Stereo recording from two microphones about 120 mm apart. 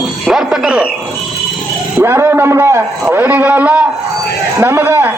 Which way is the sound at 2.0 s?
20° right (ahead or behind).